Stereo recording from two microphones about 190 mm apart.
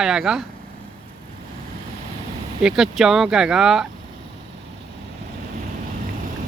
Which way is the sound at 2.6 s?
Centre (ahead or behind).